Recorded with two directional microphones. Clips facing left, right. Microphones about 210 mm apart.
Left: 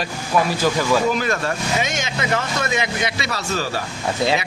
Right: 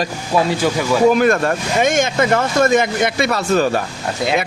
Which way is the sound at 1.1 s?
55° right (ahead or behind).